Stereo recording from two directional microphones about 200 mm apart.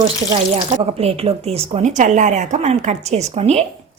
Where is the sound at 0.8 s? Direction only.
30° right (ahead or behind).